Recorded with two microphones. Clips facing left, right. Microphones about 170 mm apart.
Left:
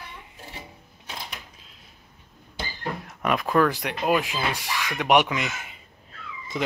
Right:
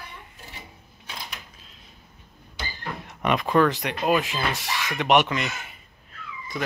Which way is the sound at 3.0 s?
Centre (ahead or behind).